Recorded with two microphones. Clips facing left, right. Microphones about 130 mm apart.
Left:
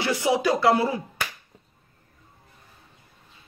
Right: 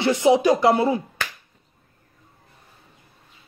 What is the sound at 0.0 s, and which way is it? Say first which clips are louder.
Speech: right 6 dB; 25° right (ahead or behind).